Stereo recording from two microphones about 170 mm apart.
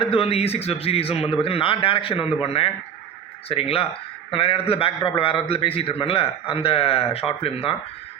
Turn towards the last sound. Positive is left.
turn(degrees=35)  # may be behind; listen again after turning